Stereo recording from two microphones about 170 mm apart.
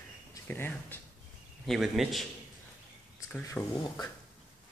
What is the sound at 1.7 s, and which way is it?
Speech, centre (ahead or behind).